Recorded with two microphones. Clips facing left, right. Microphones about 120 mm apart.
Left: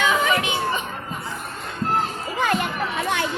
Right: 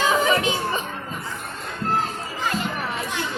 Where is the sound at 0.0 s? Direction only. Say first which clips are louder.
Right 1 dB; 35° right (ahead or behind).